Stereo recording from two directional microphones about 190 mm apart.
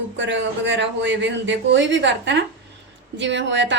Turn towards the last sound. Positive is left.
turn(degrees=-70)  # may be behind; listen again after turning